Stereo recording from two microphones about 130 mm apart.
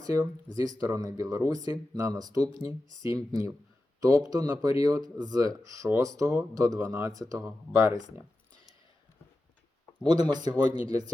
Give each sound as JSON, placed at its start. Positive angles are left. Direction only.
{"t": 0.0, "sound": "speech", "side_deg": -25}
{"t": 10.0, "sound": "speech", "side_deg": -30}